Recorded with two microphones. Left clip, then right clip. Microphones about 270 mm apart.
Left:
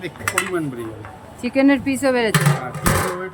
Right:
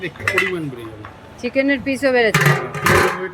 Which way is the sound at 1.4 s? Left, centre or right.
Centre.